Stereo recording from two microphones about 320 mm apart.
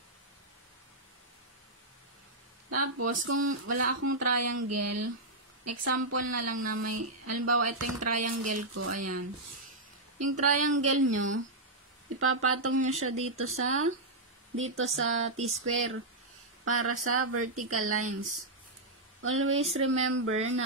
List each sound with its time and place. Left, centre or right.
2.7 s speech: right
19.2 s speech: right